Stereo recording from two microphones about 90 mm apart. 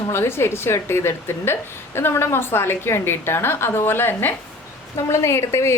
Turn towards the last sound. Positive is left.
turn(degrees=30)  # may be behind; listen again after turning